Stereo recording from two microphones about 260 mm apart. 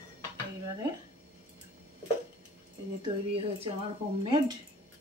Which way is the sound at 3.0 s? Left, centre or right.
Right.